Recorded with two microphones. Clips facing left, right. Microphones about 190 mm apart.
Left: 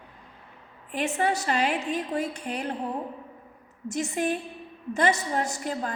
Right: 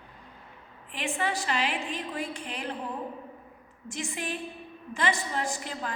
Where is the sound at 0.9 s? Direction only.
45° left (ahead or behind).